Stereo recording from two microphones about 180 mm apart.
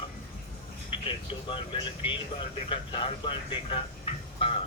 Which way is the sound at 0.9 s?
30° left (ahead or behind).